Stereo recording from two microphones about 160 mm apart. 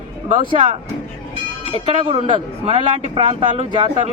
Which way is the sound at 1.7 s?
35° right (ahead or behind).